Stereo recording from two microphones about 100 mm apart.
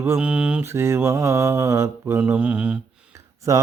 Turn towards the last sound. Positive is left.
turn(degrees=-35)  # may be behind; listen again after turning